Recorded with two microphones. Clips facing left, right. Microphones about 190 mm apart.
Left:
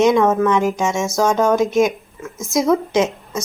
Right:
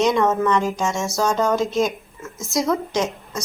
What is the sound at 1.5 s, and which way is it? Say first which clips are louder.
Speech: left 5 dB; 20° left (ahead or behind).